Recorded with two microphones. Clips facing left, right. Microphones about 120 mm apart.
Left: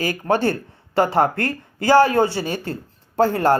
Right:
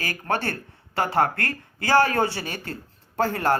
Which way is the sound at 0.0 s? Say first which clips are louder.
Left 7 dB; 20° left (ahead or behind).